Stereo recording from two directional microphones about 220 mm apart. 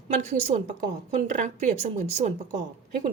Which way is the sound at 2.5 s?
40° right (ahead or behind).